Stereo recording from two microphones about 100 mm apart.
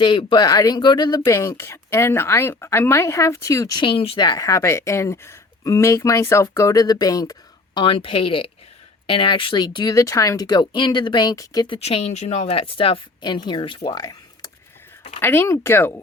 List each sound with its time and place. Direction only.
0.0 s speech: 55° left (ahead or behind)
0.4 s a woman's voice: 35° left (ahead or behind)
1.2 s speech: 30° left (ahead or behind)
3.8 s speech: 60° left (ahead or behind)
4.2 s a woman's voice: 40° left (ahead or behind)
11.7 s speech: 90° left; by 13.0 s 65° left (ahead or behind)
13.2 s speech: 50° left (ahead or behind)
15.2 s speech: 25° left (ahead or behind)